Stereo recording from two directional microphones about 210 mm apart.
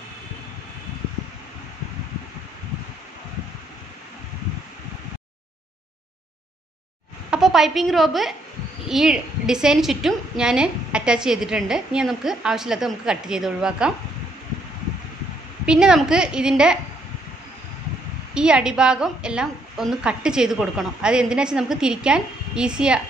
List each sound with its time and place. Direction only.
7.2 s a woman's voice: centre (ahead or behind)
15.6 s a woman's voice: 5° right (ahead or behind)
18.3 s a woman's voice: 5° right (ahead or behind)